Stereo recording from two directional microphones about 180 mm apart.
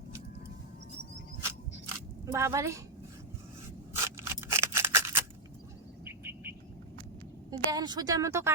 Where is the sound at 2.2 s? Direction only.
15° right (ahead or behind).